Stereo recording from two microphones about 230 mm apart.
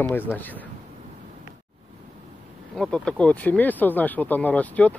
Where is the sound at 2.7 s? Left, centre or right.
Centre.